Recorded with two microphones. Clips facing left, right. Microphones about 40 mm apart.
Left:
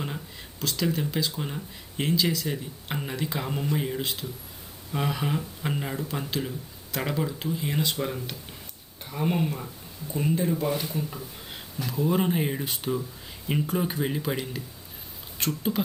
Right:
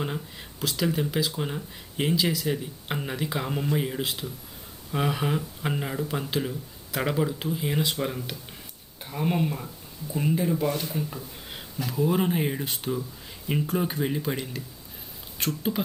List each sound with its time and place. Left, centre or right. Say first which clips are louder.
0.6 s speech: right 1 dB; centre
10.7 s speech: even; centre
10.9 s speech: even; centre